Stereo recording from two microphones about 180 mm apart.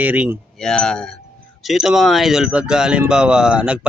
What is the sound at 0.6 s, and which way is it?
Speech, 5° left (ahead or behind).